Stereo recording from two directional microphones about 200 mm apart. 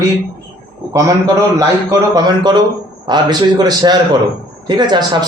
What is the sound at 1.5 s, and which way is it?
Speech, 20° right (ahead or behind).